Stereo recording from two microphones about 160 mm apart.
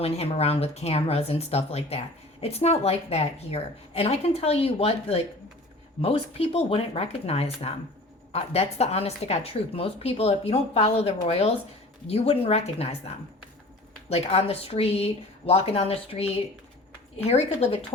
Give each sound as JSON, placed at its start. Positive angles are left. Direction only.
{"t": 0.0, "sound": "speech", "side_deg": 40}